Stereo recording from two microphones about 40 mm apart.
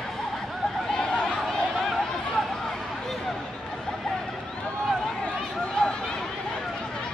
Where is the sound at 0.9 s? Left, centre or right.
Centre.